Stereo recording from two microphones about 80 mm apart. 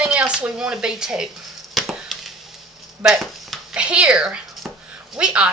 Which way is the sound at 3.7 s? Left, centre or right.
Centre.